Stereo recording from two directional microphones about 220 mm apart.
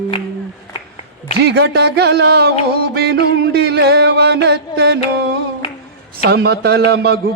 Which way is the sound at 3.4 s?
45° right (ahead or behind).